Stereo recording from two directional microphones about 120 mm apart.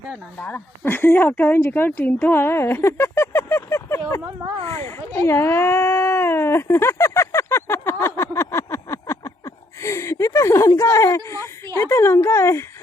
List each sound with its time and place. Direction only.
0.1 s speech: 10° left (ahead or behind)
4.6 s a sound: 20° left (ahead or behind)
11.8 s speech: 20° left (ahead or behind)